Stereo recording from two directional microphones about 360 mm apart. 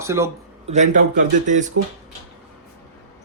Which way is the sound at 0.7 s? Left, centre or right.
Centre.